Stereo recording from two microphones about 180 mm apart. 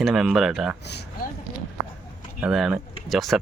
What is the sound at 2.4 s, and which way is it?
Speech, 5° right (ahead or behind).